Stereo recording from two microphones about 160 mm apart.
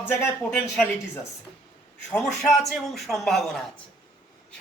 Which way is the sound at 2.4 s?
Centre (ahead or behind).